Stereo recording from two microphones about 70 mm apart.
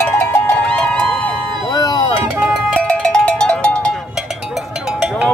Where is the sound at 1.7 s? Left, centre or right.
Left.